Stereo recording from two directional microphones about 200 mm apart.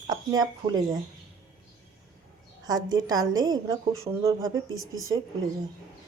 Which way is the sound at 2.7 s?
20° right (ahead or behind).